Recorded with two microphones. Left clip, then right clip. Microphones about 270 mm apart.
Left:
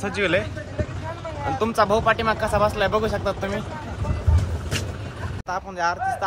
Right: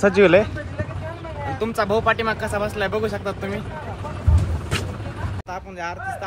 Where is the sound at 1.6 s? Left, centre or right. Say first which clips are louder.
Left 1 dB; centre.